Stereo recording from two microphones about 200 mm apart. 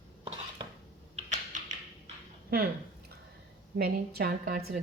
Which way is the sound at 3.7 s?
50° right (ahead or behind).